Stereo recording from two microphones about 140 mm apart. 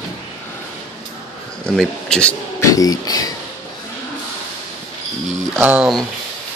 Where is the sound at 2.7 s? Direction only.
25° left (ahead or behind).